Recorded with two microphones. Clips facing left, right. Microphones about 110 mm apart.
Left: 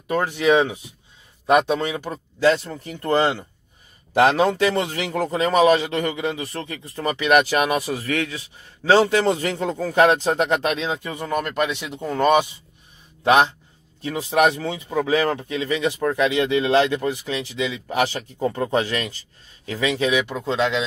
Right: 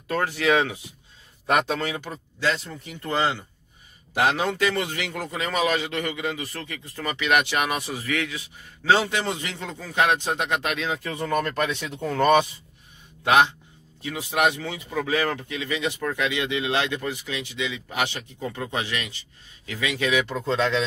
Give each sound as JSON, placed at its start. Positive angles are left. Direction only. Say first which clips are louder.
{"t": 0.1, "sound": "speech", "louder": "left 4 dB", "side_deg": 20}
{"t": 2.0, "sound": "speech", "louder": "left 8 dB", "side_deg": 40}
{"t": 13.2, "sound": "speech", "louder": "left 2 dB", "side_deg": 30}